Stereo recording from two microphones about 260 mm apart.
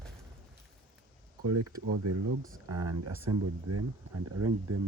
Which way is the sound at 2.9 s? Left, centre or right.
Right.